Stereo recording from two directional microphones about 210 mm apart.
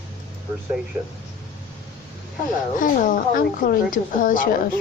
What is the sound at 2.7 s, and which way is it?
A woman's voice, 40° left (ahead or behind).